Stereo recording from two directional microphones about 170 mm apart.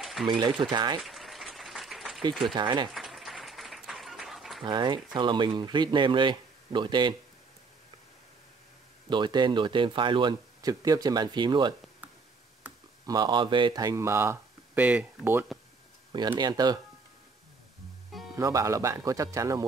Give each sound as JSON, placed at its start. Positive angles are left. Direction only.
{"t": 0.0, "sound": "a sound", "side_deg": 0}
{"t": 0.3, "sound": "speech", "side_deg": -25}
{"t": 1.0, "sound": "applause", "side_deg": 0}
{"t": 2.4, "sound": "speech", "side_deg": -25}
{"t": 2.9, "sound": "applause", "side_deg": 0}
{"t": 4.6, "sound": "speech", "side_deg": -25}
{"t": 9.1, "sound": "speech", "side_deg": -25}
{"t": 13.0, "sound": "speech", "side_deg": -25}
{"t": 16.3, "sound": "speech", "side_deg": -25}
{"t": 18.3, "sound": "speech", "side_deg": -20}